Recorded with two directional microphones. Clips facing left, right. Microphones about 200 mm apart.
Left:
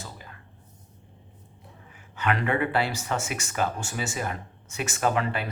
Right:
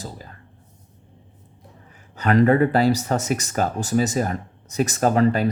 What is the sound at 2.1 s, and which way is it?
Speech, 40° right (ahead or behind).